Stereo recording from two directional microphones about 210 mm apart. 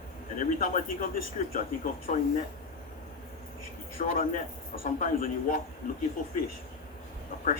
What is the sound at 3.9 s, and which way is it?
A man's voice, 40° left (ahead or behind).